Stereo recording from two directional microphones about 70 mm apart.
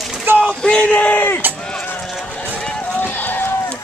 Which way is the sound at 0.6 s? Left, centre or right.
Centre.